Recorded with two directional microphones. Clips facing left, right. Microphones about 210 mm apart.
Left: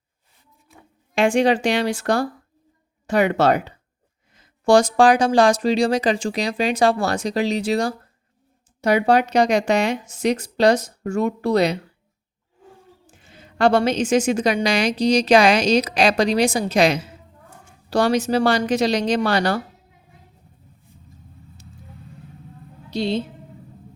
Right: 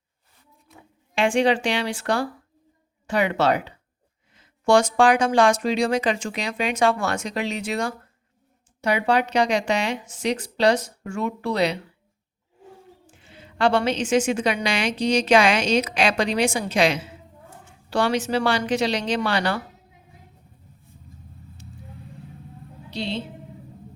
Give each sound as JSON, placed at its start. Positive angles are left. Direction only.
{"t": 1.1, "sound": "a woman's voice", "side_deg": 40}
{"t": 13.1, "sound": "a woman's voice", "side_deg": 45}
{"t": 22.9, "sound": "a woman's voice", "side_deg": 40}